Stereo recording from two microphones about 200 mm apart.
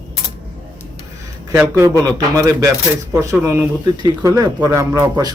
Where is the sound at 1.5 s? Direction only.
15° right (ahead or behind).